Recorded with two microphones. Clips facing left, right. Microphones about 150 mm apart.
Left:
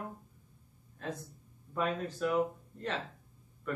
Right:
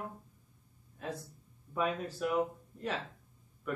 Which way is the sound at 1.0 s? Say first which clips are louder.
Even; 10° right (ahead or behind).